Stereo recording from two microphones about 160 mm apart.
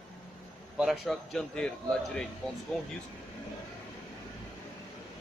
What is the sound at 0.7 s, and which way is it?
A man's voice, centre (ahead or behind).